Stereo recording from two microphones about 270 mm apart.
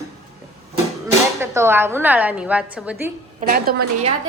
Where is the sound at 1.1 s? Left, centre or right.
Centre.